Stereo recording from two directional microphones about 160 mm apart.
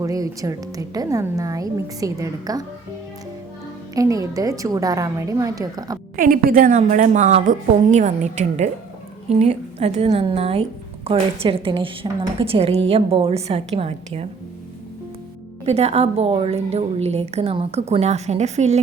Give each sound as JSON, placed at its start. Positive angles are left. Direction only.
{"t": 0.0, "sound": "a woman's voice", "side_deg": -20}
{"t": 3.9, "sound": "a woman's voice", "side_deg": -20}
{"t": 6.1, "sound": "a woman's voice", "side_deg": -65}
{"t": 15.6, "sound": "a woman's voice", "side_deg": -40}